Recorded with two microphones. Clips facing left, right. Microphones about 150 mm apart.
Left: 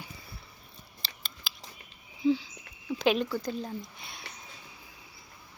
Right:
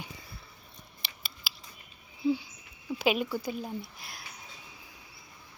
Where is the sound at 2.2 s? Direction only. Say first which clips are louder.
Left 2 dB; 10° right (ahead or behind).